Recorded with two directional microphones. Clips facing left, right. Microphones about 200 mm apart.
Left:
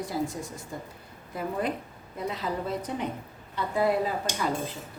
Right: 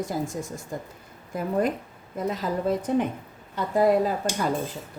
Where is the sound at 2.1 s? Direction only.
45° right (ahead or behind).